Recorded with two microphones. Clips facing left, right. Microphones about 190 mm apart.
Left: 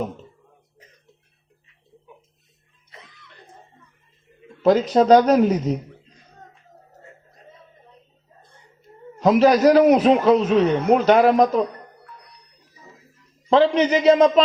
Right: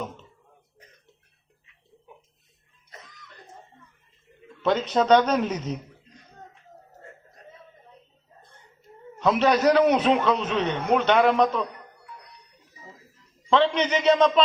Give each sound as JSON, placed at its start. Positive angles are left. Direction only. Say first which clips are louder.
{"t": 2.9, "sound": "cough", "louder": "even", "side_deg": -45}
{"t": 4.6, "sound": "a man's voice", "louder": "left 7 dB", "side_deg": 35}
{"t": 9.1, "sound": "a man's voice", "louder": "left 6 dB", "side_deg": 35}
{"t": 13.5, "sound": "a man's voice", "louder": "left 5 dB", "side_deg": 35}